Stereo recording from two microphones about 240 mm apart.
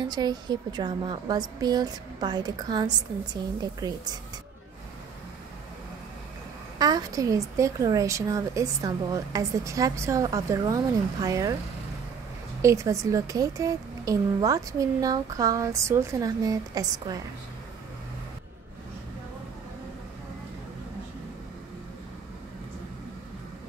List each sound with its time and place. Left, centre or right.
0.1 s a woman's voice: centre
6.8 s a woman's voice: centre
12.6 s a woman's voice: centre